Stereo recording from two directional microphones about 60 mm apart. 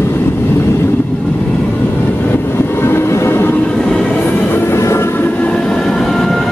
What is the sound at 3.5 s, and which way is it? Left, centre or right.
Train, centre.